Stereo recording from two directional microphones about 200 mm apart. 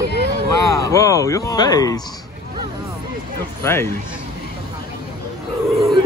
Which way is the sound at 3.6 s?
10° left (ahead or behind).